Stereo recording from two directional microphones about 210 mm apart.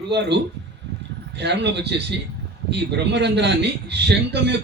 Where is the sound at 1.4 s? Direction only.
55° right (ahead or behind).